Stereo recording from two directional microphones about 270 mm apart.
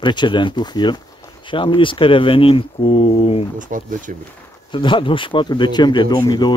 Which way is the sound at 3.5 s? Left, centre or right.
Right.